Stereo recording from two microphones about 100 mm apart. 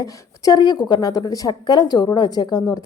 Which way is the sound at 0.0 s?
40° left (ahead or behind).